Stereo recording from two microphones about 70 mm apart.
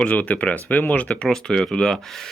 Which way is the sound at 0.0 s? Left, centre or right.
Centre.